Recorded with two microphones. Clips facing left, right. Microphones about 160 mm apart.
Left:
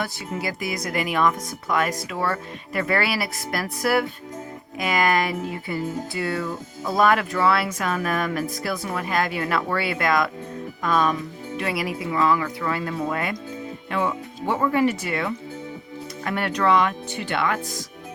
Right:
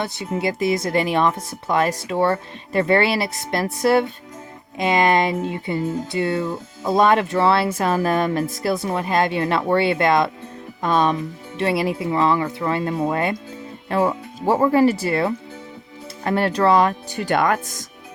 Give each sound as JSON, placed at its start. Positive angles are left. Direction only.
{"t": 0.0, "sound": "speech", "side_deg": -25}